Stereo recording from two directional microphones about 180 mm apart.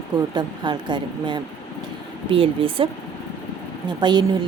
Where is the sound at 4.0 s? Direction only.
25° right (ahead or behind).